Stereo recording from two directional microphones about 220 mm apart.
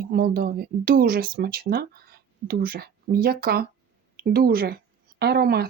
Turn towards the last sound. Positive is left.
turn(degrees=-45)  # may be behind; listen again after turning